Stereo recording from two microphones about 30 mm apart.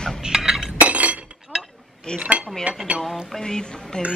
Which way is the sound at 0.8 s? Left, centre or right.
Right.